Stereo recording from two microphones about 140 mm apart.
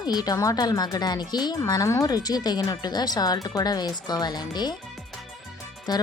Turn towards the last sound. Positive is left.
turn(degrees=30)  # may be behind; listen again after turning